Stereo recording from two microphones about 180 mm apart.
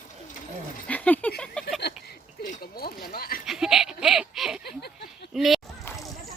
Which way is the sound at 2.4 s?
50° left (ahead or behind).